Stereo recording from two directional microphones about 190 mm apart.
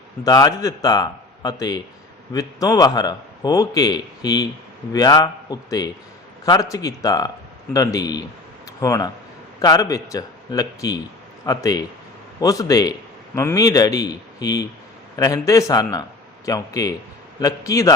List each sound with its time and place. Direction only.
0.3 s a man's voice: 20° left (ahead or behind)